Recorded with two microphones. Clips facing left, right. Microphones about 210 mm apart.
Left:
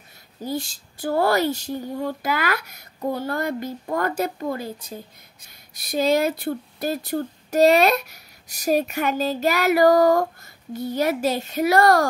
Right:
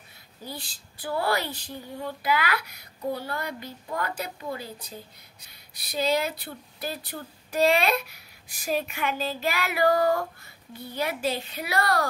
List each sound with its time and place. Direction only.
0.5 s speech: 45° left (ahead or behind)